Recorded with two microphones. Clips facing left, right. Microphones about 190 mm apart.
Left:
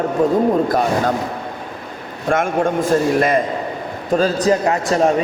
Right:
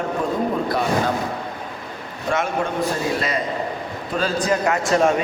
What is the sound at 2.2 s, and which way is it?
A man's voice, 50° left (ahead or behind).